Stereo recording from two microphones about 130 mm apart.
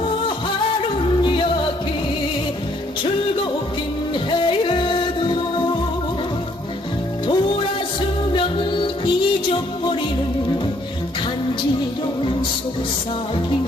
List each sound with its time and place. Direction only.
4.1 s music: 40° left (ahead or behind)
7.2 s music: 40° left (ahead or behind)